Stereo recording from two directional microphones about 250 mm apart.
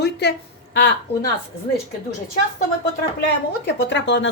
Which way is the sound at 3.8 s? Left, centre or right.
Left.